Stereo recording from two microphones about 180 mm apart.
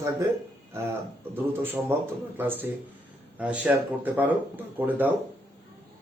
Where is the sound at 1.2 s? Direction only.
10° right (ahead or behind).